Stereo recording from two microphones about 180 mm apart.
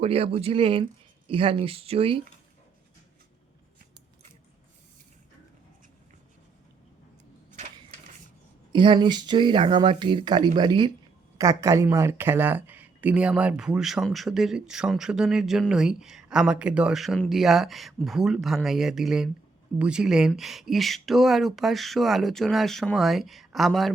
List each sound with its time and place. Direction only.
0.0 s speech: 30° right (ahead or behind)
8.7 s speech: 25° right (ahead or behind); by 23.9 s centre (ahead or behind)